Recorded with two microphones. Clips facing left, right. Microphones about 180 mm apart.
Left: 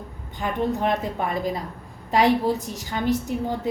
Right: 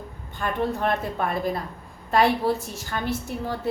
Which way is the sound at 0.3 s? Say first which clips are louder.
Left 1 dB; 15° left (ahead or behind).